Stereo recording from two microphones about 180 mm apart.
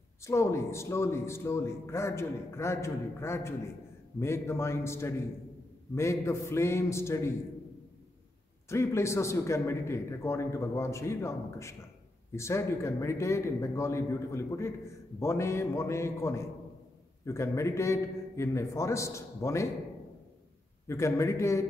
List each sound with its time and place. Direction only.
0.2 s a man's voice: 15° left (ahead or behind)
8.6 s a man's voice: 15° left (ahead or behind)
20.8 s a man's voice: 15° left (ahead or behind)